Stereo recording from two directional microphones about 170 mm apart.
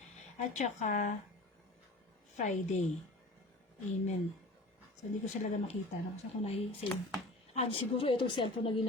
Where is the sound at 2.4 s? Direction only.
45° left (ahead or behind).